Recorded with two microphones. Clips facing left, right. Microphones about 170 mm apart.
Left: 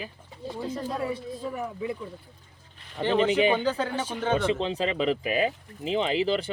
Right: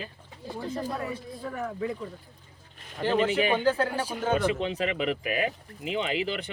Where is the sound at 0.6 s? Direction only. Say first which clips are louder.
Left 1 dB; centre (ahead or behind).